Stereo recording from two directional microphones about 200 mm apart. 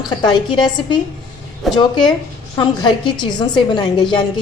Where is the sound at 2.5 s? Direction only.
25° left (ahead or behind).